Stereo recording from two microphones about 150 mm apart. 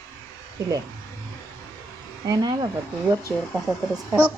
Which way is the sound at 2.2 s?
25° right (ahead or behind).